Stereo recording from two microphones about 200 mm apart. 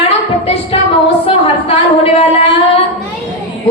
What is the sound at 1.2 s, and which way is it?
Speech, 30° left (ahead or behind).